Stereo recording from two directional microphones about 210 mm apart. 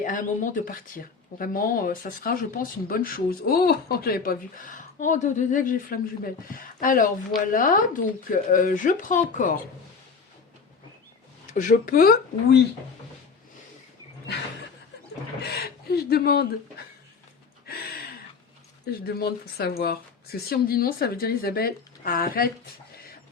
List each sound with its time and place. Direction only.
0.0 s speech: 40° left (ahead or behind)
11.5 s speech: 35° left (ahead or behind)
15.4 s speech: 50° left (ahead or behind)
17.7 s a sound: 45° left (ahead or behind)
19.0 s speech: 50° left (ahead or behind)